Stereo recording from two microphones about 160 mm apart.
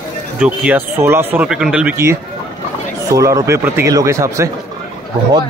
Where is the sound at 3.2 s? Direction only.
20° right (ahead or behind).